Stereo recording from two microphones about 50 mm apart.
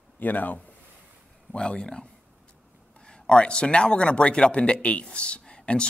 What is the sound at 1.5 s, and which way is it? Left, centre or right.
Speech, centre.